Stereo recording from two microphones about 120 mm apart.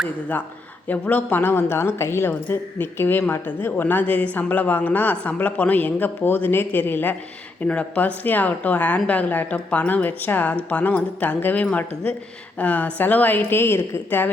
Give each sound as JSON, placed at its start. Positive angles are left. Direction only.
{"t": 0.9, "sound": "a woman's voice", "side_deg": 15}